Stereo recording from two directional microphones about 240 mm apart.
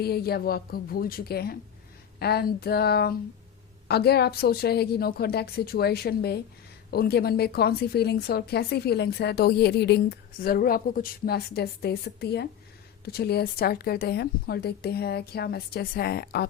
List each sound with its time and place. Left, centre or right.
0.0 s a woman's voice: left